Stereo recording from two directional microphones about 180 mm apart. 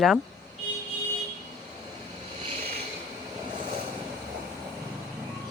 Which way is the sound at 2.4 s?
35° right (ahead or behind).